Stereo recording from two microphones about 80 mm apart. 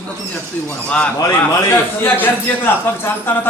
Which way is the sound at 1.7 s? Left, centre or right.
Left.